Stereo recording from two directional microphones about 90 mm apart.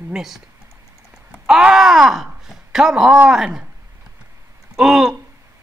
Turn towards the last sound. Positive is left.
turn(degrees=-5)  # may be behind; listen again after turning